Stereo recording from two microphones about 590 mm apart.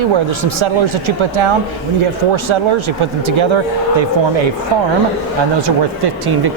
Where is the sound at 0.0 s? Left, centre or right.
Right.